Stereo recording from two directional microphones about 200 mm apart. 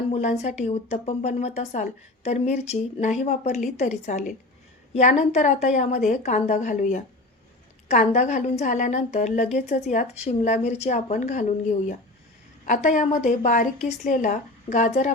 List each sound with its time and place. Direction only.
0.1 s speech: 35° left (ahead or behind)
12.6 s speech: 40° left (ahead or behind)